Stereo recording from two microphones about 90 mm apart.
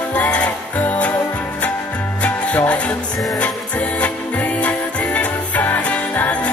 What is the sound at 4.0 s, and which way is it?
Music, 15° left (ahead or behind).